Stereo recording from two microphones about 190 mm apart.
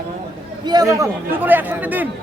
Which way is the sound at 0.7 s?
20° right (ahead or behind).